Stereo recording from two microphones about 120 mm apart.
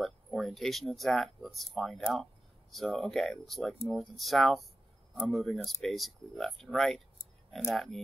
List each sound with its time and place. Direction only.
0.0 s speech: centre (ahead or behind)